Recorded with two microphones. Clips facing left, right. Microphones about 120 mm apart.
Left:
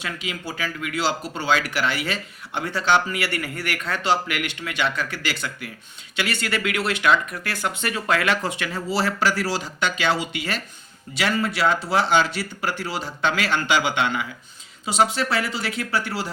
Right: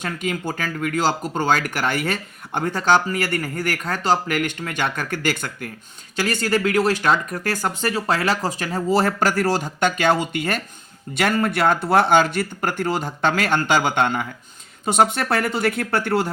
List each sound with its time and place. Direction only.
0.0 s speech: 50° right (ahead or behind)